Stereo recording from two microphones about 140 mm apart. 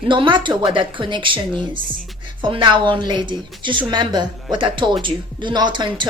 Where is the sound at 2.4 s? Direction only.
35° right (ahead or behind).